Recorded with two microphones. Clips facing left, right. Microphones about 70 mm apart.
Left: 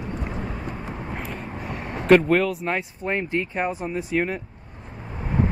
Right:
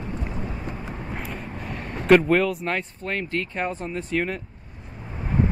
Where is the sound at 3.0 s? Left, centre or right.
Centre.